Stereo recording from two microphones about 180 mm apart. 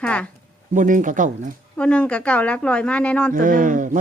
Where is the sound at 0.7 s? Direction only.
45° right (ahead or behind).